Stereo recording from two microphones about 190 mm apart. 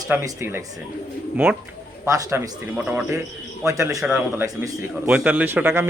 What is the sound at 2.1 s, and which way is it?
Speech, 15° right (ahead or behind).